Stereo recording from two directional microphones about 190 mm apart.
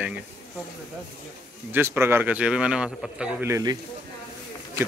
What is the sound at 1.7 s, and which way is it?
Speech, 10° right (ahead or behind).